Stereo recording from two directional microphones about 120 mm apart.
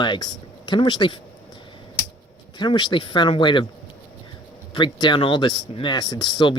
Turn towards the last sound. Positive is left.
turn(degrees=40)  # may be behind; listen again after turning